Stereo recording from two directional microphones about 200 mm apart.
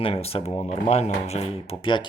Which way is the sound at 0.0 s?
30° left (ahead or behind).